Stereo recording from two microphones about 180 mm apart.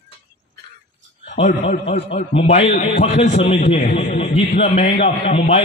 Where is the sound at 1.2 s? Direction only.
45° left (ahead or behind).